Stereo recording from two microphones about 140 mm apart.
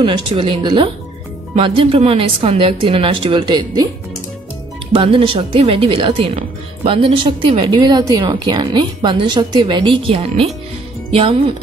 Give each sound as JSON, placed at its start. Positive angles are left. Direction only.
{"t": 0.0, "sound": "speech", "side_deg": -35}
{"t": 4.9, "sound": "speech", "side_deg": -40}